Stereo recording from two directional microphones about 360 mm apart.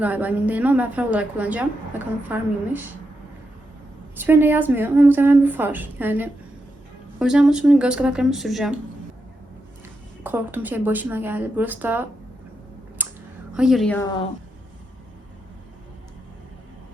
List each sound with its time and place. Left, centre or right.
0.0 s a woman's voice: centre
4.2 s a woman's voice: centre
10.2 s a woman's voice: centre
13.0 s a sound: centre
13.5 s a woman's voice: centre